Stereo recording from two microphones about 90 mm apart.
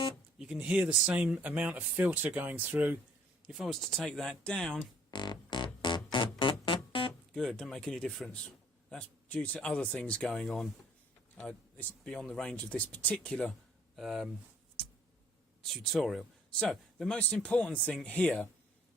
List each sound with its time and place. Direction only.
0.3 s speech: 5° right (ahead or behind)
3.4 s speech: centre (ahead or behind)
5.1 s music: 55° left (ahead or behind)
7.3 s a man's voice: 5° left (ahead or behind)
13.9 s speech: 5° right (ahead or behind)
15.6 s speech: 5° left (ahead or behind)